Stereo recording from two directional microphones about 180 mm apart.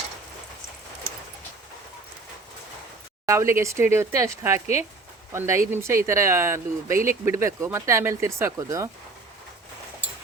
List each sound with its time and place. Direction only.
3.2 s speech: 15° right (ahead or behind)